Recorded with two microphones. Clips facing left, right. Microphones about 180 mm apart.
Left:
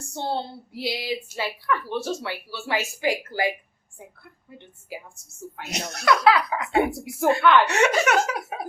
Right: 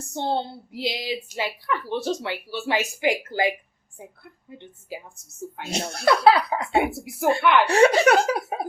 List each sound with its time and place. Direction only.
0.1 s a woman's voice: 20° right (ahead or behind)
6.8 s a woman's voice: 5° right (ahead or behind)
7.6 s speech: 35° right (ahead or behind)